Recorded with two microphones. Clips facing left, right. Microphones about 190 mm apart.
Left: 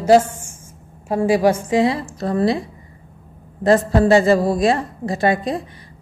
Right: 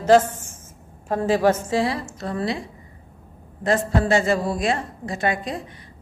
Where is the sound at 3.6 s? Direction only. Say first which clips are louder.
Left 6 dB; 35° left (ahead or behind).